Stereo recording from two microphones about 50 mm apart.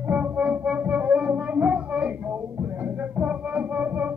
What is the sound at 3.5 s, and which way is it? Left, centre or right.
Music, right.